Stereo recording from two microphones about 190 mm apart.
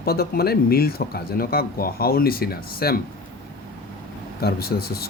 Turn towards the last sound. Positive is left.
turn(degrees=55)  # may be behind; listen again after turning